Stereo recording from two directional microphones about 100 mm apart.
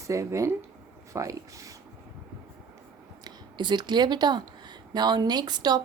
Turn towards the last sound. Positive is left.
turn(degrees=-45)  # may be behind; listen again after turning